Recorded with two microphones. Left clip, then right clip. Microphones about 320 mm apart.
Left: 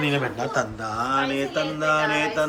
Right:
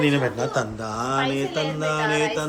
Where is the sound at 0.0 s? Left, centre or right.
Centre.